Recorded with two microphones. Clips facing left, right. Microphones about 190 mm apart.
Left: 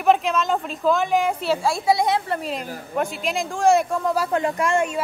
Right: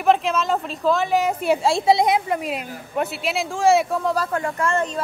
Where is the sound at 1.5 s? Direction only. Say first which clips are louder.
Right 4 dB; 25° right (ahead or behind); by 4.3 s centre (ahead or behind).